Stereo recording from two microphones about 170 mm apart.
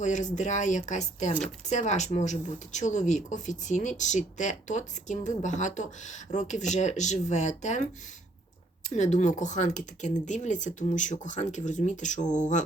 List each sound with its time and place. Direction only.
0.0 s speech: 45° left (ahead or behind)
9.0 s speech: 45° left (ahead or behind)